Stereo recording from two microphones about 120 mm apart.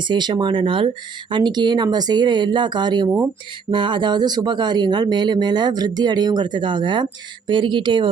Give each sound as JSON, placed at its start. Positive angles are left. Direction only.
{"t": 0.0, "sound": "speech", "side_deg": -40}